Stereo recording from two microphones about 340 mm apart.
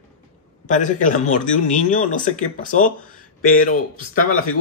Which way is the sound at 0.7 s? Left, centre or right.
Left.